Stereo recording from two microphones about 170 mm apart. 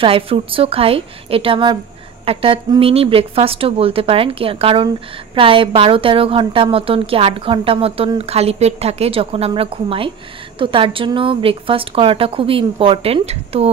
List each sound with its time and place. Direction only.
0.0 s a woman's voice: 35° right (ahead or behind)